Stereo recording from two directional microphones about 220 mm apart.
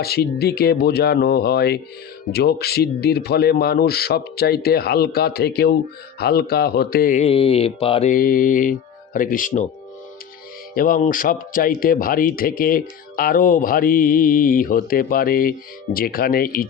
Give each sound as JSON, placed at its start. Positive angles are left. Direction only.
{"t": 0.0, "sound": "speech", "side_deg": 45}
{"t": 8.1, "sound": "speech", "side_deg": 40}
{"t": 10.8, "sound": "speech", "side_deg": 40}